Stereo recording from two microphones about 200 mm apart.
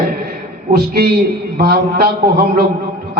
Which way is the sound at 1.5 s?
50° right (ahead or behind).